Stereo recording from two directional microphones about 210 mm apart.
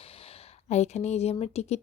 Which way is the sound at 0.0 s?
30° left (ahead or behind).